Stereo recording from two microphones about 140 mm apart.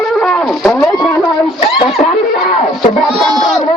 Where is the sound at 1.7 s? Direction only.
40° left (ahead or behind).